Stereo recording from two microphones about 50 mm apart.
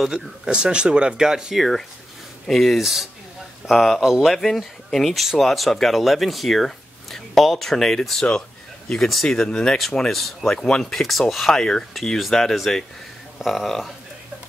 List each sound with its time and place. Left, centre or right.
0.1 s speech: centre
1.6 s speech: centre
4.0 s speech: centre
4.3 s speech: centre
8.3 s a sound: centre
9.5 s speech: centre
10.1 s speech: centre
11.5 s speech: centre
11.9 s speech: centre